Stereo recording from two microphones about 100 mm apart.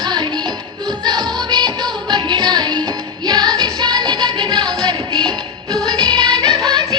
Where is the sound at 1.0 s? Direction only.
45° right (ahead or behind).